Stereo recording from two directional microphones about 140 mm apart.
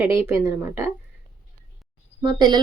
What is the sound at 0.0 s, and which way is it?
Speech, 20° right (ahead or behind).